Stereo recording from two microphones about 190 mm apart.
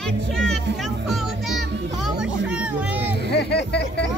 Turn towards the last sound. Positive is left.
turn(degrees=60)  # may be behind; listen again after turning